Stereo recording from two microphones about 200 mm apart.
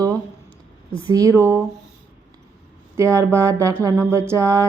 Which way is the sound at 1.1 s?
15° right (ahead or behind).